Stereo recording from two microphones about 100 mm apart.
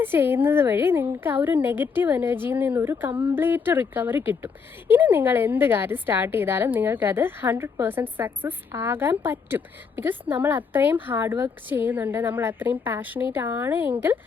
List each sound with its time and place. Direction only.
0.0 s speech: 20° right (ahead or behind)